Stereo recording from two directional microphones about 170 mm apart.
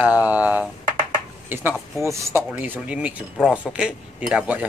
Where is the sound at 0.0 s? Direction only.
10° right (ahead or behind).